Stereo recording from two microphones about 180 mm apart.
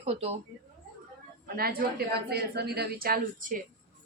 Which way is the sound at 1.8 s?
55° right (ahead or behind).